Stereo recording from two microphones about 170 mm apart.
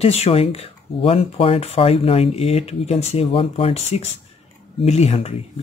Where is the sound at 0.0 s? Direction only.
35° left (ahead or behind).